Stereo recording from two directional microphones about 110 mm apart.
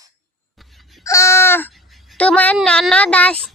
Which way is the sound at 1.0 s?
25° left (ahead or behind).